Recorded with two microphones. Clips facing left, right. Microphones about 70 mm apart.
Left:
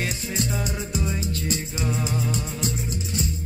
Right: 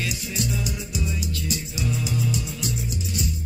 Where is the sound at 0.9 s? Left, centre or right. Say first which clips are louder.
Left 3 dB; left.